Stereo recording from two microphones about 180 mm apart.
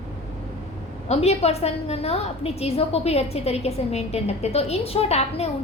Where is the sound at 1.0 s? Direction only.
35° left (ahead or behind).